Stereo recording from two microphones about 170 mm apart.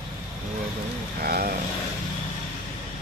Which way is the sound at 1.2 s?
60° right (ahead or behind).